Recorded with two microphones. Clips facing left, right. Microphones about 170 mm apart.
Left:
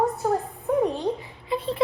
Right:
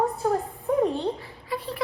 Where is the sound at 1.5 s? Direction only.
25° left (ahead or behind).